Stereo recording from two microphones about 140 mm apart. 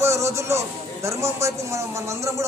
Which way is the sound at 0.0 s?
20° right (ahead or behind).